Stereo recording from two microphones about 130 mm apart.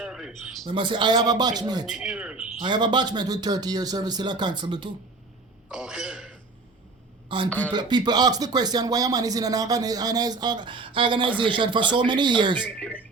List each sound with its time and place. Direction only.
0.0 s a sound: 5° right (ahead or behind)
0.6 s speech: 40° right (ahead or behind)
1.9 s a man's voice: 5° right (ahead or behind)
2.6 s speech: 35° right (ahead or behind)
5.6 s a sound: 5° right (ahead or behind)
7.3 s a man's voice: 40° right (ahead or behind)
12.6 s speech: 10° left (ahead or behind)